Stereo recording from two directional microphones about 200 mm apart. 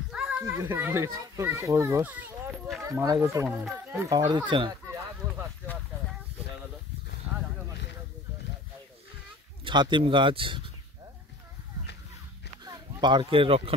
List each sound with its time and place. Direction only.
0.1 s a child's voice: 5° right (ahead or behind)
3.4 s speech: 5° right (ahead or behind)
4.3 s bow-wow: 25° right (ahead or behind)
9.7 s speech: 25° right (ahead or behind)
12.6 s speech: 20° right (ahead or behind)